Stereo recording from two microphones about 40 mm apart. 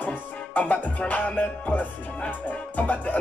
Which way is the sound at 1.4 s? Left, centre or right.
Left.